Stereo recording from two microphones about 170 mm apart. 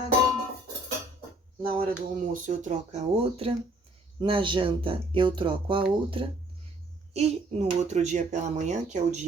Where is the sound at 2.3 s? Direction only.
45° right (ahead or behind); by 6.2 s 30° right (ahead or behind).